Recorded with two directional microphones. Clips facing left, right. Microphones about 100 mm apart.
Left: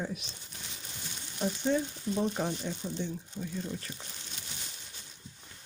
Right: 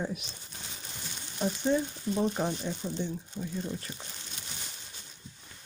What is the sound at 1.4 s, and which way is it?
Frying, 20° right (ahead or behind).